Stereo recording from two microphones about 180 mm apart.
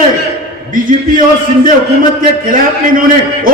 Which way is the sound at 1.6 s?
50° right (ahead or behind).